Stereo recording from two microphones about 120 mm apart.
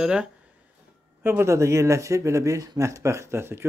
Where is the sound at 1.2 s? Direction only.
20° right (ahead or behind).